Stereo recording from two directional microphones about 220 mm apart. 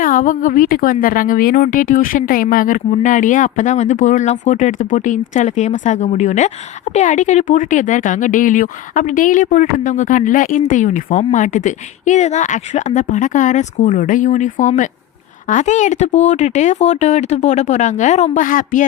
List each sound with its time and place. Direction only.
0.0 s speech: 40° left (ahead or behind)